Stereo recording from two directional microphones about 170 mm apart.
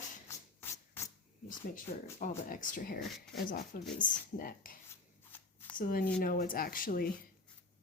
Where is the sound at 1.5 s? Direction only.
50° left (ahead or behind).